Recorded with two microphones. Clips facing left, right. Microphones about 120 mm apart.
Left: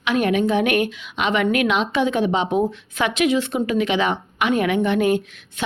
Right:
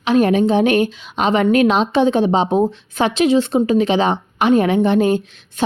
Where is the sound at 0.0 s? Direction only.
35° right (ahead or behind).